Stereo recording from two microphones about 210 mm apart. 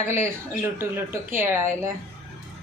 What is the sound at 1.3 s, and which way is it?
Speech, 10° right (ahead or behind).